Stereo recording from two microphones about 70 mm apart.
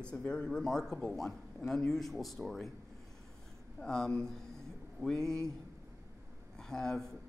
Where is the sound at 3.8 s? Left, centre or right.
Centre.